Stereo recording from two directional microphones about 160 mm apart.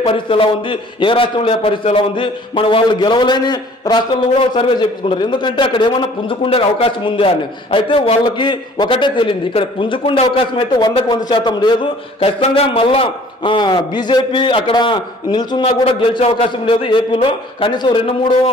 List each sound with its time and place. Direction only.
0.0 s a man's voice: 35° left (ahead or behind)